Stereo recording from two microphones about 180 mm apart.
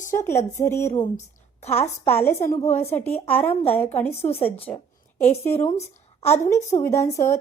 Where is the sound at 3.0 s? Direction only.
35° left (ahead or behind).